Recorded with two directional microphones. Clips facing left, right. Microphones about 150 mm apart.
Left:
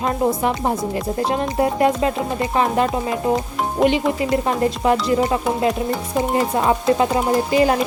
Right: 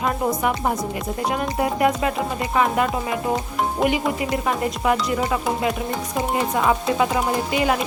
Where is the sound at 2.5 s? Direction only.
30° left (ahead or behind).